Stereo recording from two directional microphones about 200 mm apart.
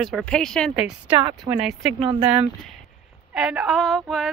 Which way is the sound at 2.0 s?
30° right (ahead or behind).